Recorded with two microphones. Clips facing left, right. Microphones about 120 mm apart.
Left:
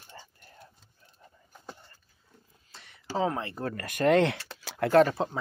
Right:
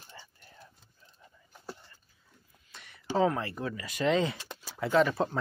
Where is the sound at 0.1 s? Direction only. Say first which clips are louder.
Left 3 dB; 40° left (ahead or behind).